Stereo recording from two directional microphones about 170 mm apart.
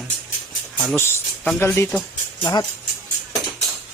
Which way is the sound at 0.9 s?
15° left (ahead or behind).